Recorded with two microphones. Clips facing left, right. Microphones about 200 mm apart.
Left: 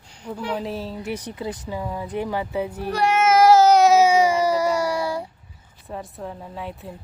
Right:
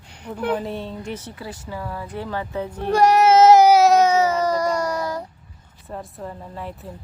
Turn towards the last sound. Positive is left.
turn(degrees=0)  # may be behind; listen again after turning